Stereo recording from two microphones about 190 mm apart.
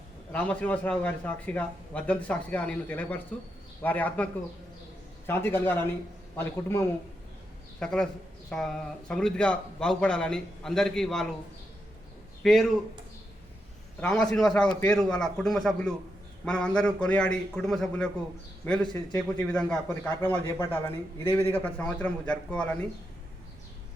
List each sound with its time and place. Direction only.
0.3 s a man's voice: 5° left (ahead or behind)
12.4 s speech: centre (ahead or behind)
14.0 s a man's voice: 5° left (ahead or behind)